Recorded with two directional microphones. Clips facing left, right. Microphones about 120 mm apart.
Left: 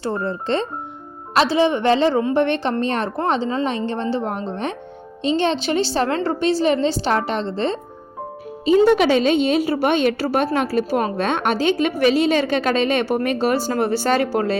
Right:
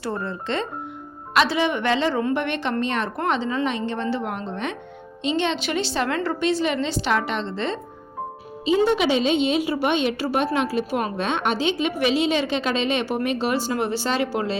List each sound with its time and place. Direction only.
0.0 s a woman's voice: 30° left (ahead or behind)
8.6 s a woman's voice: 45° left (ahead or behind)